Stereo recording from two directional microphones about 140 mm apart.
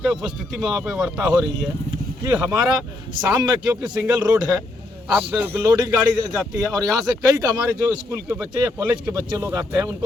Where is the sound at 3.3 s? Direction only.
30° right (ahead or behind).